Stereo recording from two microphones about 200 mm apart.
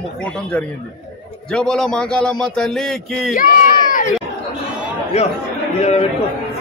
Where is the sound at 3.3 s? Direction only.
40° left (ahead or behind).